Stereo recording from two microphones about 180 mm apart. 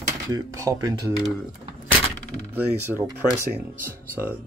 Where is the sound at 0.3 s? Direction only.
20° right (ahead or behind).